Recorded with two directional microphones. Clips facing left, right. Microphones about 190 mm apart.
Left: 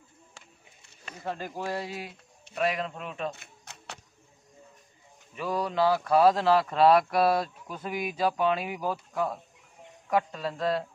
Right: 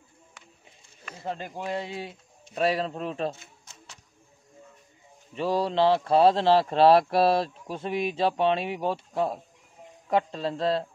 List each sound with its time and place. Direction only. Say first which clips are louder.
1.1 s speech: even; 25° right (ahead or behind)
3.3 s music: left 1 dB; 65° left (ahead or behind)
5.3 s speech: right 4 dB; 30° right (ahead or behind)